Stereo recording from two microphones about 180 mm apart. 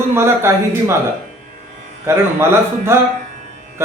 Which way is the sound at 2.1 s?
15° right (ahead or behind).